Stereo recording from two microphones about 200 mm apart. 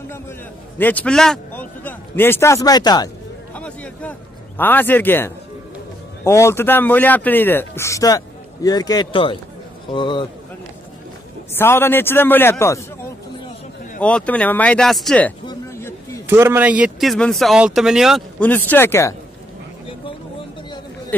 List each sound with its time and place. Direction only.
0.7 s a man's voice: 10° left (ahead or behind)
3.5 s a sound: 5° left (ahead or behind)
6.2 s a man's voice: 15° left (ahead or behind)
11.5 s a man's voice: 10° left (ahead or behind)
14.0 s a man's voice: 5° left (ahead or behind)
15.4 s a sound: 15° left (ahead or behind)
16.3 s speech: 10° right (ahead or behind)
18.5 s a man's voice: 10° left (ahead or behind)